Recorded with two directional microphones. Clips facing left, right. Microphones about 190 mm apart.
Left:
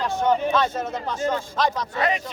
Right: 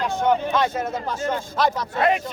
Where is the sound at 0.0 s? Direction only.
10° right (ahead or behind).